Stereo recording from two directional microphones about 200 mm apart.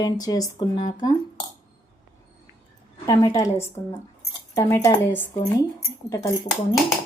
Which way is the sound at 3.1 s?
20° left (ahead or behind).